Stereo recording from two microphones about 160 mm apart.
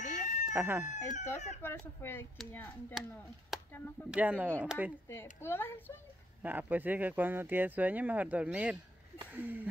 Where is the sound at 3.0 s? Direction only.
Centre (ahead or behind).